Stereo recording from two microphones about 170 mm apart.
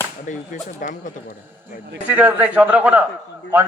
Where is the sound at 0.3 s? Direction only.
50° left (ahead or behind).